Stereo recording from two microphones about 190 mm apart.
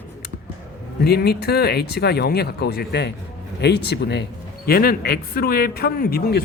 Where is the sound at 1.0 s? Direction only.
55° left (ahead or behind).